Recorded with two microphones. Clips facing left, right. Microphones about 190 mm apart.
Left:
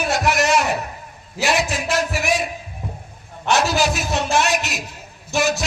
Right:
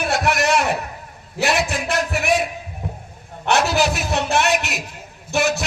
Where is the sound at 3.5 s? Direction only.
60° right (ahead or behind).